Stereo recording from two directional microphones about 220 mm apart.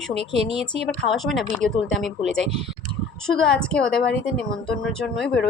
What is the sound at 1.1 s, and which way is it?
A woman's voice, centre (ahead or behind).